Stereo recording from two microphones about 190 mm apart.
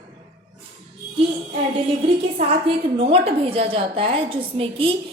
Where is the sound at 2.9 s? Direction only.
30° right (ahead or behind).